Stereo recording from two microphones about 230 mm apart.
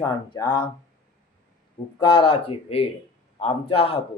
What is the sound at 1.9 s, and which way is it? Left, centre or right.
Speech, left.